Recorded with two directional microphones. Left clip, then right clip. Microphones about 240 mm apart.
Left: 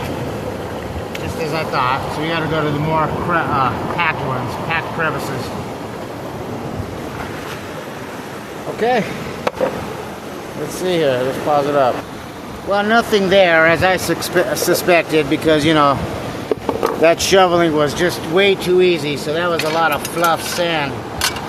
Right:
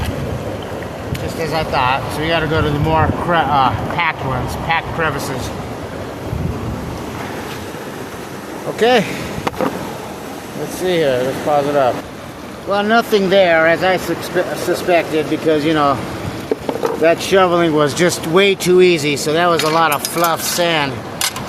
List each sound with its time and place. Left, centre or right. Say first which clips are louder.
1.5 s speech: right 2 dB; right
8.8 s speech: right 4 dB; right
10.8 s speech: right 1 dB; centre
14.4 s speech: left 2 dB; left
17.0 s speech: left 1 dB; centre
17.7 s speech: right 2 dB; centre